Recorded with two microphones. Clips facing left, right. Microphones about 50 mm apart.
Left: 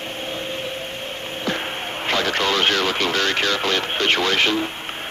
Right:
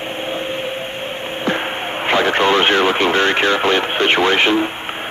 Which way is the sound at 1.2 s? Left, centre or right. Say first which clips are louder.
Right 5 dB; right.